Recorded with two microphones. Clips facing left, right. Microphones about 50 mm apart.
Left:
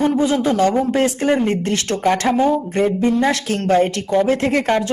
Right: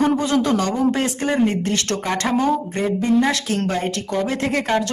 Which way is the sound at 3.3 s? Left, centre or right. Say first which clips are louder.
Left 4 dB; left.